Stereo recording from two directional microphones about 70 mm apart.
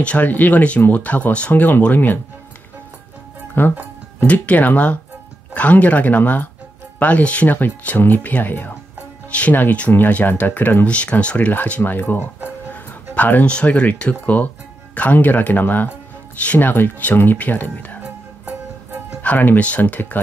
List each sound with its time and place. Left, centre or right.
0.0 s speech: centre
3.6 s speech: left
19.2 s speech: left